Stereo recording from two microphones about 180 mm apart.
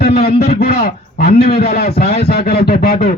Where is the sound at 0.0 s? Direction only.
60° left (ahead or behind).